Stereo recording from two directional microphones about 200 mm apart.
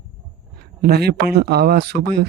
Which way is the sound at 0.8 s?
55° right (ahead or behind).